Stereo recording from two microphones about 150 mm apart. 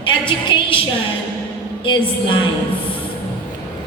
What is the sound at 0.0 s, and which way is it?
Speech, 35° left (ahead or behind).